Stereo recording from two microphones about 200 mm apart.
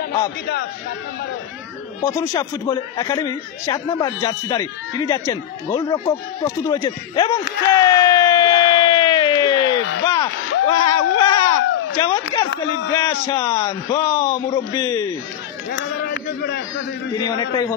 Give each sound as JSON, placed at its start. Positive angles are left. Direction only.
{"t": 2.0, "sound": "a man's voice", "side_deg": 15}
{"t": 7.6, "sound": "a sound", "side_deg": 15}
{"t": 12.0, "sound": "a man's voice", "side_deg": 20}
{"t": 15.7, "sound": "speech", "side_deg": 55}
{"t": 17.2, "sound": "a man's voice", "side_deg": 15}